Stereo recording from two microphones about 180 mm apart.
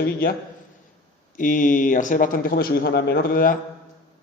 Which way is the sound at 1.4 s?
45° left (ahead or behind).